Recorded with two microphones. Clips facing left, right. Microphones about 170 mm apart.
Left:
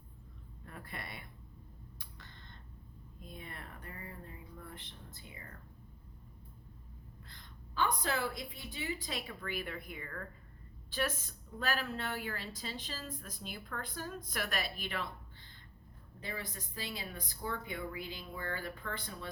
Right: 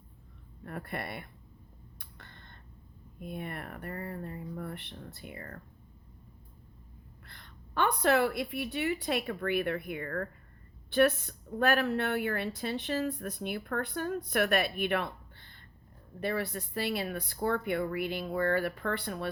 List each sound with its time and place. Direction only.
0.6 s a woman's voice: 60° right (ahead or behind)
2.0 s a sound: 55° right (ahead or behind)
3.2 s a woman's voice: 60° right (ahead or behind)
7.3 s a woman's voice: 65° right (ahead or behind)